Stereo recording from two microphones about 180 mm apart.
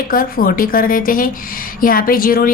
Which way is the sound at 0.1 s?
55° left (ahead or behind).